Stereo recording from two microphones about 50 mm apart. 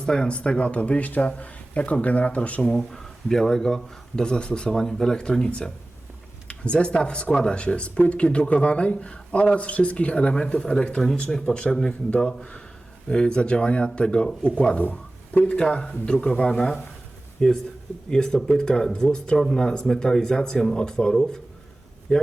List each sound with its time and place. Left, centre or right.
0.0 s speech: centre
2.7 s speech: centre
4.7 s speech: centre
14.8 s speech: left; by 21.2 s centre